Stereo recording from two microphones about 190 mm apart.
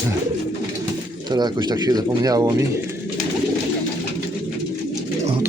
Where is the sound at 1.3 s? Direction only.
20° right (ahead or behind).